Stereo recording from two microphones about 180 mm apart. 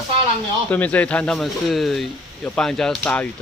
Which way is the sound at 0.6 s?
10° left (ahead or behind).